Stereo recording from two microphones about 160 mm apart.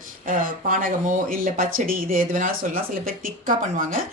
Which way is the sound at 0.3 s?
60° right (ahead or behind).